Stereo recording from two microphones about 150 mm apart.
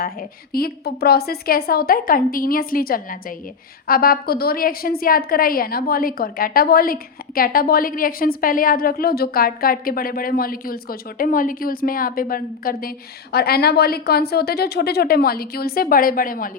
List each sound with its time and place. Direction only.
0.0 s a woman's voice: 85° left
13.3 s a woman's voice: 90° left; by 16.5 s 70° left (ahead or behind)